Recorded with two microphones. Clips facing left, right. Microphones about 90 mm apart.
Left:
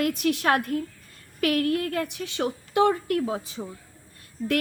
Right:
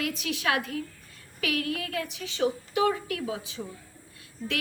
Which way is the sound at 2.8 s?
45° left (ahead or behind).